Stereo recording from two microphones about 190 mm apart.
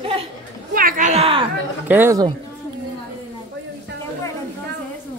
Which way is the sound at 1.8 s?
10° right (ahead or behind).